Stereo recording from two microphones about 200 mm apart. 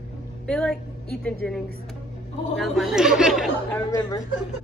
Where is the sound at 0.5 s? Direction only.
5° left (ahead or behind).